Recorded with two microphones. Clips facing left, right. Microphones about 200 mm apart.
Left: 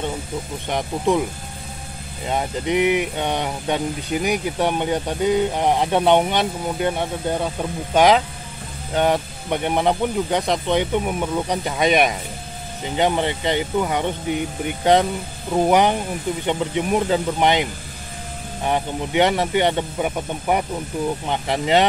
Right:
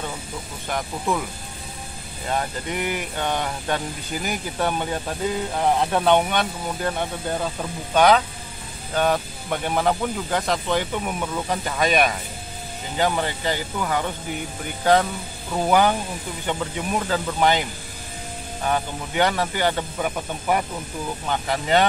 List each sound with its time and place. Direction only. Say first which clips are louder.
0.7 s speech: left 5 dB; 20° left (ahead or behind)
2.2 s speech: left 4 dB; 20° left (ahead or behind)